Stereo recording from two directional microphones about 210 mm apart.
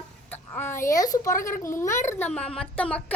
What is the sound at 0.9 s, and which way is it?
Speech, 15° left (ahead or behind).